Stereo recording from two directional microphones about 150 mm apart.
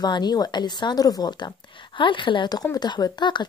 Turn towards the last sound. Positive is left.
turn(degrees=30)  # may be behind; listen again after turning